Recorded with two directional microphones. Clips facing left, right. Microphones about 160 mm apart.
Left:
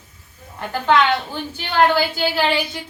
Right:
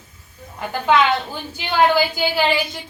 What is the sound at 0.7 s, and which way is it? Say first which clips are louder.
A woman's voice: even; 5° right (ahead or behind).